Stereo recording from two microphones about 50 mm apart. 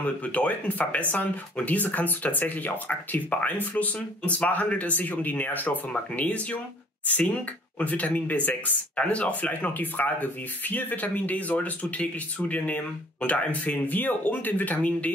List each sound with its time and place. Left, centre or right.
0.0 s speech: left
7.8 s speech: left